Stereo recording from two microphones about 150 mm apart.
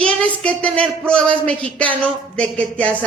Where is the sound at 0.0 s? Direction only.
5° left (ahead or behind).